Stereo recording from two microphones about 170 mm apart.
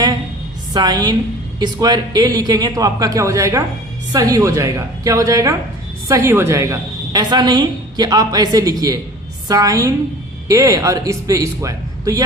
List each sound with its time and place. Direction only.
0.7 s a woman's voice: 25° right (ahead or behind)